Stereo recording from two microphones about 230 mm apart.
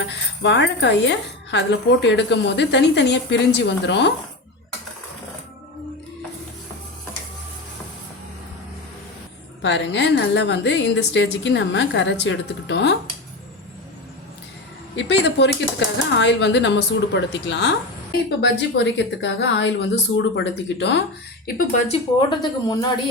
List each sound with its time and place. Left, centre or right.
0.0 s speech: left
9.6 s speech: left
14.9 s speech: left
21.7 s speech: left
22.3 s speech: centre